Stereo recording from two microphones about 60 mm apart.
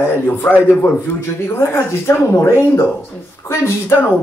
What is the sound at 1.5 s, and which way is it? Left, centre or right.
Speech, left.